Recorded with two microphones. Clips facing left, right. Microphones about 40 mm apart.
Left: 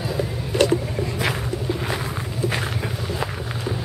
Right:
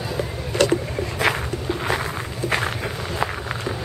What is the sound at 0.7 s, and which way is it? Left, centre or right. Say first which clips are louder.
Walk: even; right.